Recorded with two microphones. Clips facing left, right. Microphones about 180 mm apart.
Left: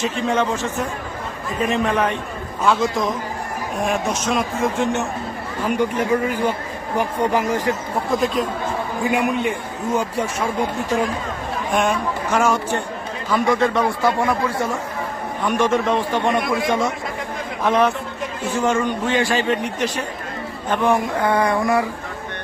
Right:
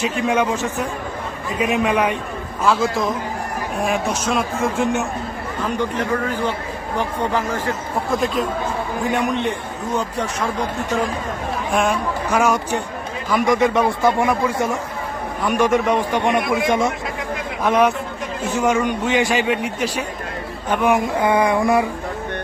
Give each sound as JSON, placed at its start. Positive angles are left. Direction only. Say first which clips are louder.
{"t": 0.0, "sound": "a man's voice", "louder": "right 1 dB", "side_deg": -10}
{"t": 5.7, "sound": "speech", "louder": "left 3 dB", "side_deg": 10}
{"t": 8.1, "sound": "speech", "louder": "even", "side_deg": 0}
{"t": 11.7, "sound": "speech", "louder": "even", "side_deg": 0}
{"t": 12.3, "sound": "a man's voice", "louder": "right 1 dB", "side_deg": -10}
{"t": 16.4, "sound": "speech", "louder": "right 1 dB", "side_deg": 0}
{"t": 16.6, "sound": "a man's voice", "louder": "right 2 dB", "side_deg": -15}